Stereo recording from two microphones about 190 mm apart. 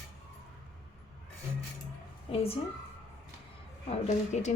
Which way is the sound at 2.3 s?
30° left (ahead or behind).